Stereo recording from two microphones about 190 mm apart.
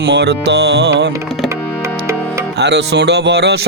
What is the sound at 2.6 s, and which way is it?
Speech, 60° right (ahead or behind).